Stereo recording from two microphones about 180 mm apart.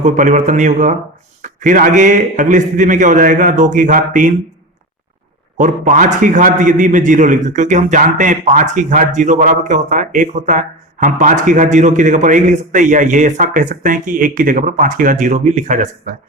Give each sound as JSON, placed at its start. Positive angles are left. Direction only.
{"t": 0.0, "sound": "a man's voice", "side_deg": -45}
{"t": 5.5, "sound": "a man's voice", "side_deg": -45}